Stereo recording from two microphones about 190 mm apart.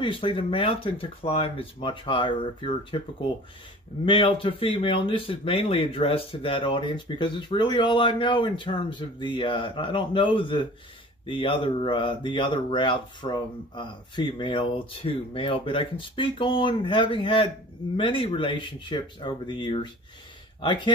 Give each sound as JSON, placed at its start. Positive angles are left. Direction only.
{"t": 0.0, "sound": "speech", "side_deg": 25}
{"t": 4.0, "sound": "speech", "side_deg": 25}